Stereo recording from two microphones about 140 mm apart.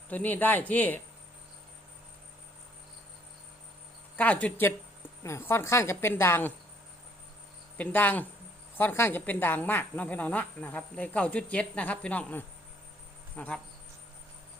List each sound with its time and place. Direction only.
0.1 s a woman's voice: 10° left (ahead or behind)
4.2 s a woman's voice: 10° left (ahead or behind)
7.8 s a woman's voice: 10° left (ahead or behind)